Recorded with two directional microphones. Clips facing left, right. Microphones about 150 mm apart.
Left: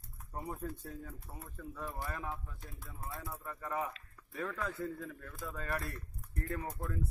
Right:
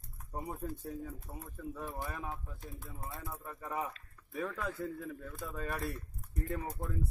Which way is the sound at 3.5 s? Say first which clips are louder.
Left 1 dB; 15° right (ahead or behind).